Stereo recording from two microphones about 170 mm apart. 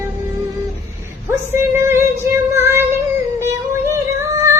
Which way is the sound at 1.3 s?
15° right (ahead or behind).